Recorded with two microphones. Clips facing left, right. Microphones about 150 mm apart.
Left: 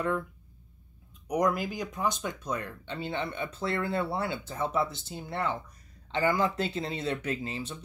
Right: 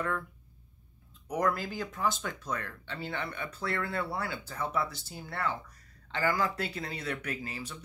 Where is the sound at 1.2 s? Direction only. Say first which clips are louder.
Left 3 dB; 15° left (ahead or behind).